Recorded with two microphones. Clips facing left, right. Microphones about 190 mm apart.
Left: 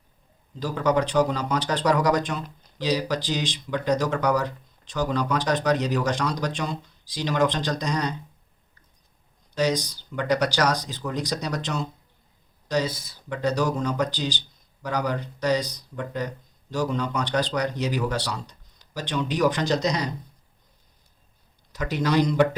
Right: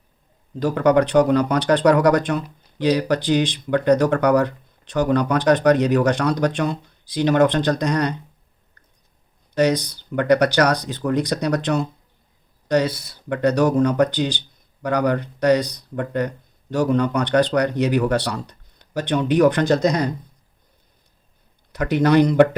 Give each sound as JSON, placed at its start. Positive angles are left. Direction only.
{"t": 0.6, "sound": "speech", "side_deg": -60}
{"t": 9.6, "sound": "speech", "side_deg": -60}
{"t": 21.7, "sound": "speech", "side_deg": -60}